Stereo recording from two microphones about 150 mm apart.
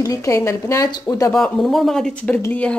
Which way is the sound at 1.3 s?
5° left (ahead or behind).